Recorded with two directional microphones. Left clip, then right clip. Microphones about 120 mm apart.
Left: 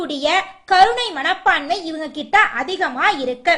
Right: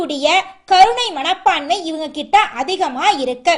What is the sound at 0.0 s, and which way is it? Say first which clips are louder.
A woman's voice: right 3 dB; 15° right (ahead or behind).